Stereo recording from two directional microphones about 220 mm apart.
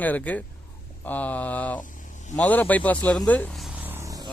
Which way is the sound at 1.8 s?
35° left (ahead or behind).